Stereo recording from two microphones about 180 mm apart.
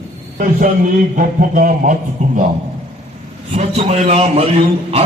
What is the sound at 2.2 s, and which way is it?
Speech, 40° right (ahead or behind).